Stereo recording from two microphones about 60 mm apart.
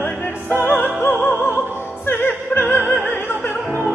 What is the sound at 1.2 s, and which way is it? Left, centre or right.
Opera, left.